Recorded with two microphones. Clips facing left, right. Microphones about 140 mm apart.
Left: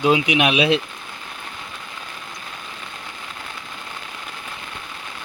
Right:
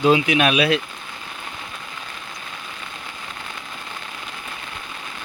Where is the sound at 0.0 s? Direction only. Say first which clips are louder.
Right 1 dB; 15° left (ahead or behind).